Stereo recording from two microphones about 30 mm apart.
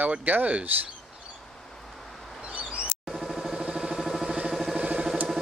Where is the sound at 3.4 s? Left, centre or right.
Right.